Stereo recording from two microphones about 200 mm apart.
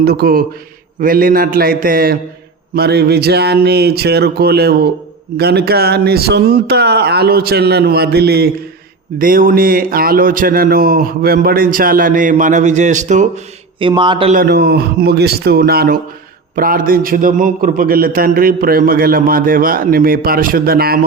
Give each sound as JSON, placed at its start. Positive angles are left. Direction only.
{"t": 0.0, "sound": "speech", "side_deg": -50}
{"t": 14.3, "sound": "speech", "side_deg": -50}